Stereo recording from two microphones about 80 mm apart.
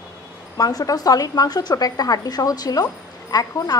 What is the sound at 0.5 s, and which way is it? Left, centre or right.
A woman's voice, left.